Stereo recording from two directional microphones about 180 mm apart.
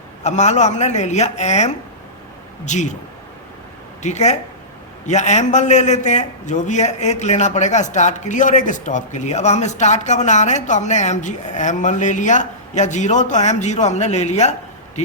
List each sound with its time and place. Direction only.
0.2 s a man's voice: 40° left (ahead or behind)
4.0 s a man's voice: 40° left (ahead or behind)